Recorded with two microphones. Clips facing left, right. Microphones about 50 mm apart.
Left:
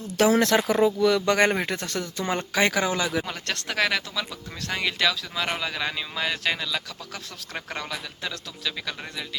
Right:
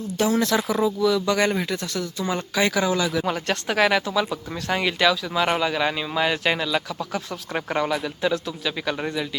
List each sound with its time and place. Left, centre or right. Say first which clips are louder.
0.2 s speech: left 2 dB; left
1.0 s speech: right 2 dB; left
2.8 s speech: right 3 dB; centre
3.2 s speech: right 7 dB; centre